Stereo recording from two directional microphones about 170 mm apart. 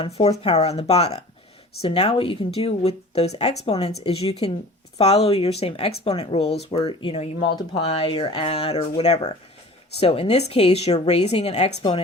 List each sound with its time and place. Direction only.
0.0 s speech: 40° left (ahead or behind)